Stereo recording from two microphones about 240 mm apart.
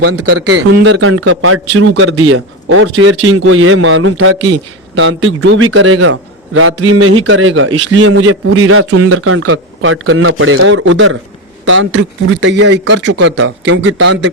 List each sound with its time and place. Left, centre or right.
0.0 s a man's voice: right
0.3 s speech: right
1.1 s a man's voice: right